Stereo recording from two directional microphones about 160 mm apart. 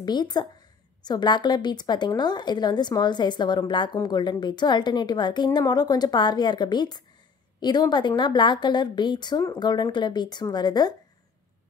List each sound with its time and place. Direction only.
0.0 s a woman's voice: 25° left (ahead or behind)